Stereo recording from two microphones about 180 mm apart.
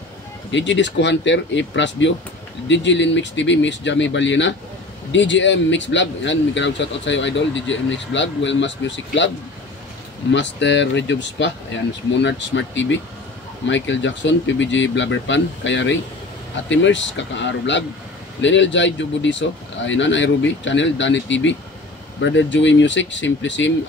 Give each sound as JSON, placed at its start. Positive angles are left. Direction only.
{"t": 0.5, "sound": "a man's voice", "side_deg": 85}
{"t": 10.3, "sound": "a man's voice", "side_deg": 80}